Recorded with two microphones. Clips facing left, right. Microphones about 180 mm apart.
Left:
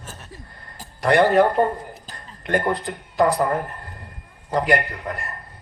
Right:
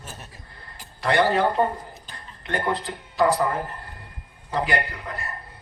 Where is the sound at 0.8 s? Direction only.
45° left (ahead or behind).